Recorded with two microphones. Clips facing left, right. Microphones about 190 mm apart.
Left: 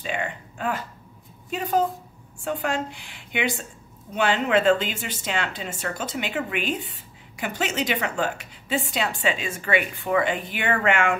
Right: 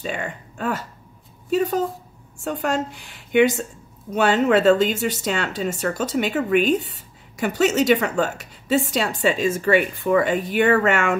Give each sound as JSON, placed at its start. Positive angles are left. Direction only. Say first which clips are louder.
{"t": 0.0, "sound": "a woman's voice", "louder": "right 1 dB", "side_deg": -40}